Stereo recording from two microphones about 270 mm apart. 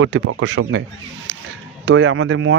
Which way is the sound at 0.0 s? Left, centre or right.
Right.